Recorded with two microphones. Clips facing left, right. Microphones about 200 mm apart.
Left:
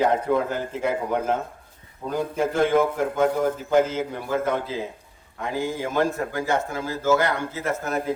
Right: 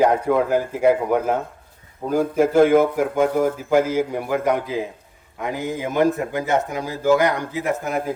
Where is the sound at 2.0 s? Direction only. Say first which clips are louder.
Right 6 dB; 45° right (ahead or behind).